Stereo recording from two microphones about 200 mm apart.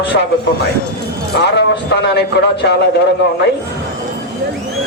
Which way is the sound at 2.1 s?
55° left (ahead or behind).